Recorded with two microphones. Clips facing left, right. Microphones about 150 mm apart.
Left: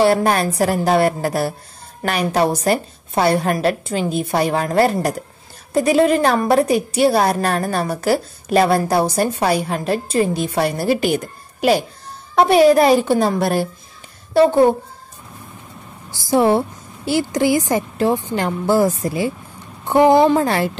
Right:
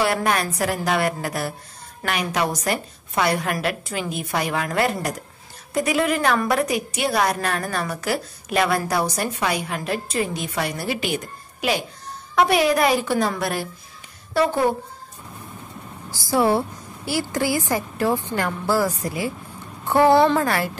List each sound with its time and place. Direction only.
0.0 s a woman's voice: 30° left (ahead or behind)
16.1 s a woman's voice: 20° left (ahead or behind)